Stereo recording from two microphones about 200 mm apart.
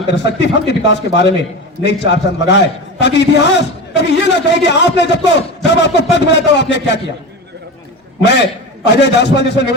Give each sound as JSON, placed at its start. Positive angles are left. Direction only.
{"t": 0.1, "sound": "a man's voice", "side_deg": 60}
{"t": 8.2, "sound": "a man's voice", "side_deg": 60}